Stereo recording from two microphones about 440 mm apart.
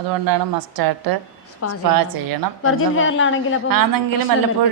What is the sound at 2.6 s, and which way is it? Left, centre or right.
Speech, left.